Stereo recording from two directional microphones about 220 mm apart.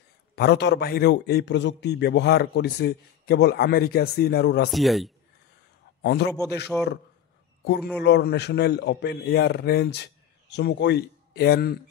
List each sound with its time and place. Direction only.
0.4 s a man's voice: 50° left (ahead or behind)
4.7 s a man's voice: centre (ahead or behind)
6.0 s a man's voice: 50° left (ahead or behind)
6.7 s a man's voice: centre (ahead or behind)
7.6 s a man's voice: 50° left (ahead or behind)